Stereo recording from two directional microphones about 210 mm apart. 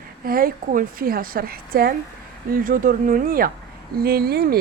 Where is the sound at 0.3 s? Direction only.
45° right (ahead or behind).